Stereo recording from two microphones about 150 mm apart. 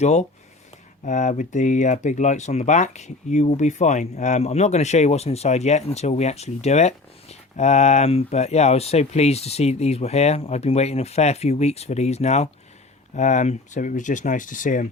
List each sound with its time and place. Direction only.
0.0 s speech: 50° left (ahead or behind)